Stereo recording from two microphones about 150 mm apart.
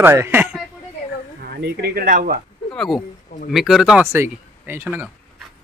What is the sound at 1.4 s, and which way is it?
Speech, 90° right.